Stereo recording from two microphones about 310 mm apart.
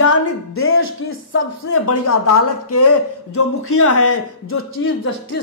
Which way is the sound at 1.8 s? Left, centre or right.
Left.